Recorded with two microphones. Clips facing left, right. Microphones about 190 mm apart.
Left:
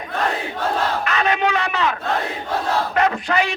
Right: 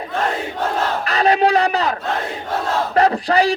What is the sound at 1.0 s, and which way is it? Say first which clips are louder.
Battle cry: right 4 dB; 35° right (ahead or behind).